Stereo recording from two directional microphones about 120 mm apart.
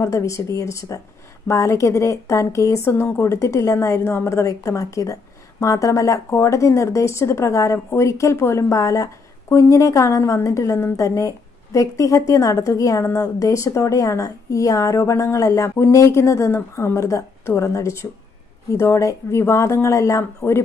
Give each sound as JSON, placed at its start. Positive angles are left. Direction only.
{"t": 0.0, "sound": "a woman's voice", "side_deg": 25}